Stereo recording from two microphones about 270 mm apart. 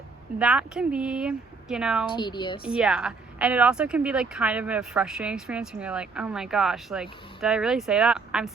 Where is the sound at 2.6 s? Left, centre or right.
Centre.